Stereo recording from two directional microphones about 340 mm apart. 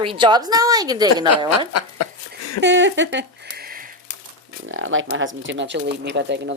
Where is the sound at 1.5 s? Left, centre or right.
Left.